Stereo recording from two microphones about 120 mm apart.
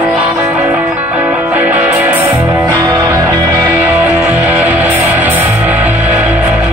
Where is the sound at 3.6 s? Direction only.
15° right (ahead or behind).